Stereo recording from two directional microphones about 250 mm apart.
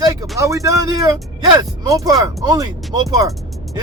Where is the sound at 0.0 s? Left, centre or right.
Centre.